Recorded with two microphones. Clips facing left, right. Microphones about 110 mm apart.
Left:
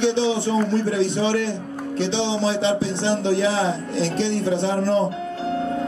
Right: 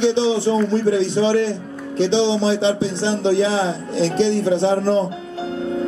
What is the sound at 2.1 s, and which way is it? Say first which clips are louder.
A man's voice: right 5 dB; 20° right (ahead or behind).